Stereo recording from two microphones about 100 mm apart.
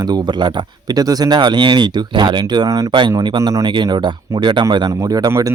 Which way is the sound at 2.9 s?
50° right (ahead or behind).